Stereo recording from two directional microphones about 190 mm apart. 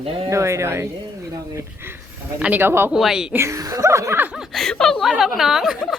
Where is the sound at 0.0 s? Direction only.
30° right (ahead or behind).